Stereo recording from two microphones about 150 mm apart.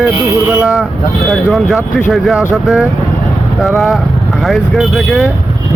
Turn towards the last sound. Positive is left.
turn(degrees=0)  # may be behind; listen again after turning